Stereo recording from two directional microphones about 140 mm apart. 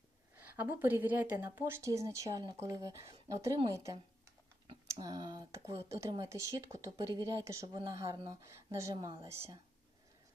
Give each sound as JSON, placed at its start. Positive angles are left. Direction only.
{"t": 0.3, "sound": "a woman's voice", "side_deg": -15}
{"t": 4.9, "sound": "a woman's voice", "side_deg": -30}